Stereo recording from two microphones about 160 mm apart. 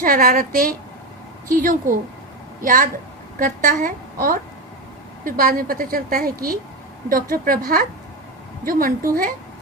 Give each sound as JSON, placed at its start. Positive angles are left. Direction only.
{"t": 0.0, "sound": "a woman's voice", "side_deg": -65}